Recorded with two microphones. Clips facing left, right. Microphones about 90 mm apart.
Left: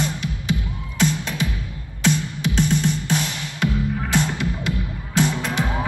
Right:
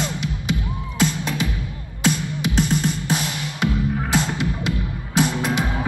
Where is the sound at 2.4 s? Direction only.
20° right (ahead or behind).